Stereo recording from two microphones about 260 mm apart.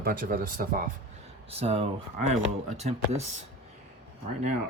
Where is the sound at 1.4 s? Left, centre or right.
Right.